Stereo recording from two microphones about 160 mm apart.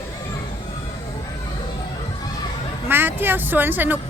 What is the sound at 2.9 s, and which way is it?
A woman's voice, 10° right (ahead or behind).